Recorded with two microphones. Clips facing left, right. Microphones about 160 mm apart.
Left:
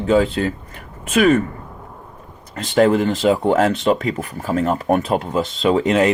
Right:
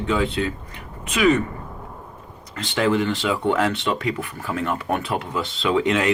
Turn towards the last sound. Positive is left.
turn(degrees=40)  # may be behind; listen again after turning